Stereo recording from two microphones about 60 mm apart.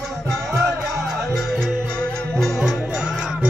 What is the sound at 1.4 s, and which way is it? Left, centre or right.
Music, centre.